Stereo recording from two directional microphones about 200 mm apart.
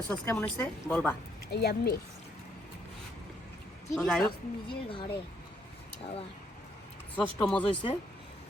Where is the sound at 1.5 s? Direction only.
55° left (ahead or behind).